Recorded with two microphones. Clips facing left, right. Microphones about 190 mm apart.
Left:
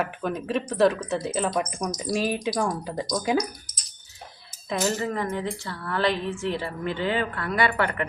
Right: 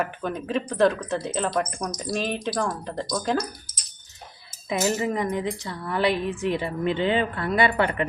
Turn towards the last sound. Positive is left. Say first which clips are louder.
# right 2 dB
turn(degrees=-25)  # may be behind; listen again after turning